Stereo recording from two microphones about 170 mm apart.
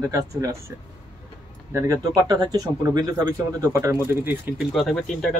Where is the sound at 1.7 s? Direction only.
20° right (ahead or behind).